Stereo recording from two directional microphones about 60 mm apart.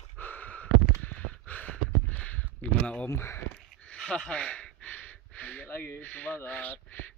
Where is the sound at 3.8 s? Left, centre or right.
Centre.